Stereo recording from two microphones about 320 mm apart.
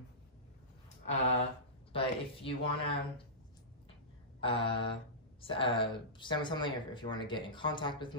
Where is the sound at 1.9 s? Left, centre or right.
Centre.